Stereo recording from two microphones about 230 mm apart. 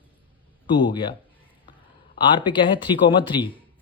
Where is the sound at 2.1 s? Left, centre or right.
Left.